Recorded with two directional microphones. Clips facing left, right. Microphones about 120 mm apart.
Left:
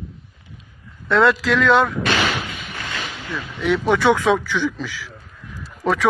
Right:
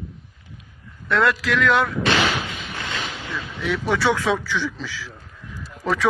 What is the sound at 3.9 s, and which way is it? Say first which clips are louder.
A man's voice: left 4 dB; 15° left (ahead or behind).